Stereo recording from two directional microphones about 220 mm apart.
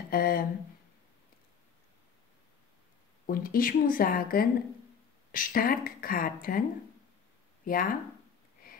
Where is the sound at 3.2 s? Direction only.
40° left (ahead or behind).